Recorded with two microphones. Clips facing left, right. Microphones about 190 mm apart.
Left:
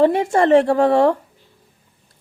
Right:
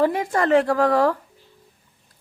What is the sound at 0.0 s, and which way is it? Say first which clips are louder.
A woman's voice: left 5 dB; 25° left (ahead or behind).